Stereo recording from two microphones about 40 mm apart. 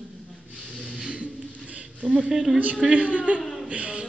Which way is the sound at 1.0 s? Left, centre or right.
Right.